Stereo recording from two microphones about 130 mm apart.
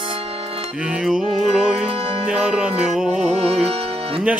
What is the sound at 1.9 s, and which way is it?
Music, 50° right (ahead or behind).